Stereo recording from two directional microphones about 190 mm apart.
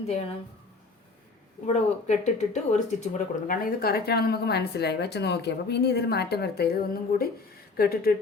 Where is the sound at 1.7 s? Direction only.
35° left (ahead or behind).